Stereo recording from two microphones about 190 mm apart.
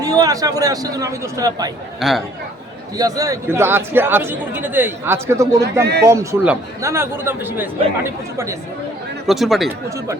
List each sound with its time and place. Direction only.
0.0 s a man's voice: 20° right (ahead or behind)
2.0 s speech: centre (ahead or behind)
3.0 s speech: 20° right (ahead or behind)
5.8 s speech: 60° right (ahead or behind)
6.1 s speech: 10° right (ahead or behind)
9.2 s speech: centre (ahead or behind)